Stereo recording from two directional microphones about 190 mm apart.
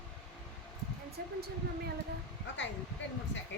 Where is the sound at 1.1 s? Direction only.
55° right (ahead or behind).